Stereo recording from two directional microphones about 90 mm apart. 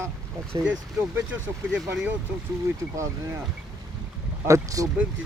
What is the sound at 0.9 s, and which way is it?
Speech, 25° right (ahead or behind).